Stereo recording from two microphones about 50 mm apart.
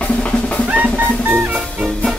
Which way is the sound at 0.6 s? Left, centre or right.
Right.